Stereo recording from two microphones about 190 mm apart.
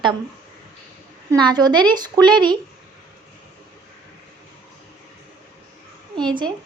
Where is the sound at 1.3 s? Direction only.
20° right (ahead or behind).